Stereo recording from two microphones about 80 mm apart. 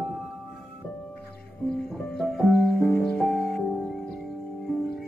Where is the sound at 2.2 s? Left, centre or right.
Centre.